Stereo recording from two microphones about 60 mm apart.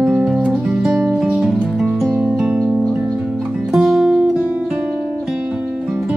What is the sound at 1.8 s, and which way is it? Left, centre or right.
Music, centre.